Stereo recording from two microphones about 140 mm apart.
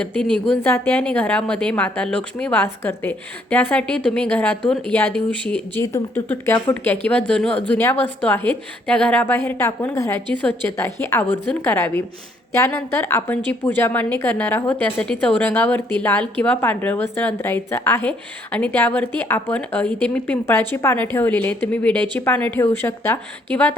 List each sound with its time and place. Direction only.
0.0 s a woman's voice: 10° left (ahead or behind)
5.8 s a woman's voice: 20° left (ahead or behind)